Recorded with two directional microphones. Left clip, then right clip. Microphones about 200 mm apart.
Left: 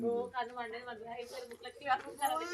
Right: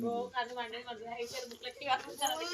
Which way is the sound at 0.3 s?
Centre (ahead or behind).